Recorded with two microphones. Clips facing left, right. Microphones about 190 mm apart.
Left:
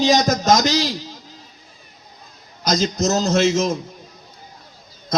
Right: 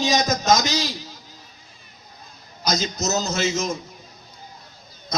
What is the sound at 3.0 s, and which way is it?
Speech, 50° left (ahead or behind).